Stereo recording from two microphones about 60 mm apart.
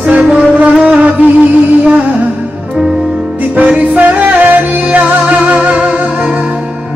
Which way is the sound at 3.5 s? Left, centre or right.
Right.